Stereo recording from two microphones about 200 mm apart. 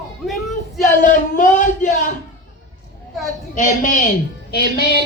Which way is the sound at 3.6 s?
40° left (ahead or behind).